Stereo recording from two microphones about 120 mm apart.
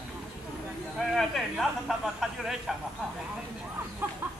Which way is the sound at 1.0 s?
Centre (ahead or behind).